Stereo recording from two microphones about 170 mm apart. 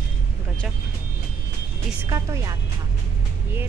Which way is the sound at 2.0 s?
20° right (ahead or behind).